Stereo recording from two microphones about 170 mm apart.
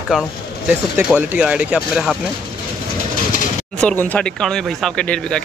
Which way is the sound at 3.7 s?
10° left (ahead or behind).